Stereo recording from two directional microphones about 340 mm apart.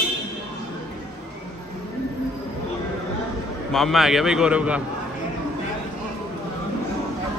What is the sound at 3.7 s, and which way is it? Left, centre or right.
Speech, centre.